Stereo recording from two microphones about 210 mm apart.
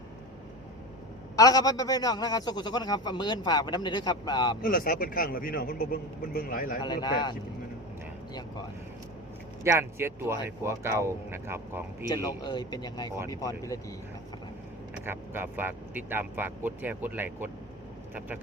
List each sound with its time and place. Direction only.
1.4 s a man's voice: 15° left (ahead or behind)
4.6 s a man's voice: 40° left (ahead or behind)
6.8 s a man's voice: 20° left (ahead or behind)
9.6 s speech: 10° right (ahead or behind)
12.0 s a man's voice: 20° left (ahead or behind)
14.9 s speech: 10° right (ahead or behind)